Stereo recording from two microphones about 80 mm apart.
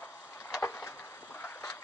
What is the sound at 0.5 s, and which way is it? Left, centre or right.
Vehicle, left.